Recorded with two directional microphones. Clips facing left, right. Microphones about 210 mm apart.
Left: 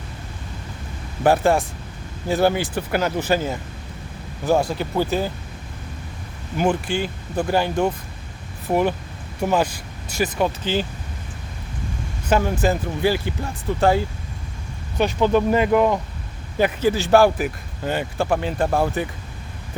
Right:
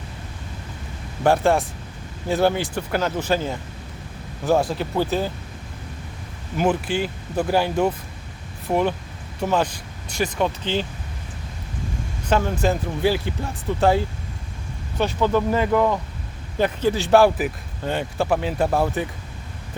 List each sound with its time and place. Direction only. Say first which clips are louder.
1.2 s speech: left 1 dB; 5° left (ahead or behind)
6.6 s speech: even; 5° right (ahead or behind)
8.6 s speech: left 1 dB; 5° left (ahead or behind)
12.3 s speech: left 1 dB; centre (ahead or behind)
14.9 s speech: left 2 dB; 15° left (ahead or behind); by 19.0 s centre (ahead or behind)